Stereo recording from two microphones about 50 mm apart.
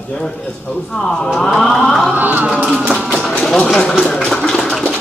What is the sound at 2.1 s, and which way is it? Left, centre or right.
Music, right.